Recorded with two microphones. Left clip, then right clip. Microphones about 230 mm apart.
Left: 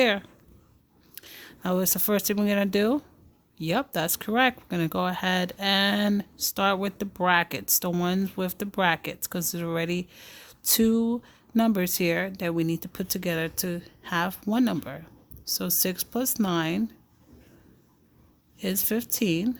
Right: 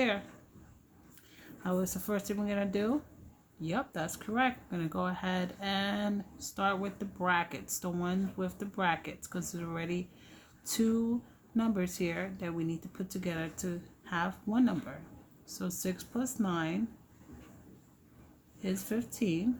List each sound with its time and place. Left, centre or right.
1.1 s speech: left
18.6 s speech: left